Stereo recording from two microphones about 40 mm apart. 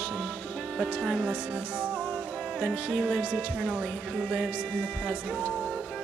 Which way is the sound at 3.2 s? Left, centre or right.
Right.